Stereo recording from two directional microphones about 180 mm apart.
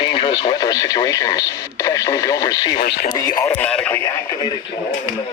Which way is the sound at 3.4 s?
10° left (ahead or behind).